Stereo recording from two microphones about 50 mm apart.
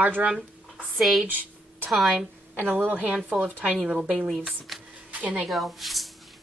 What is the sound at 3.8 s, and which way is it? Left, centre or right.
Speech, centre.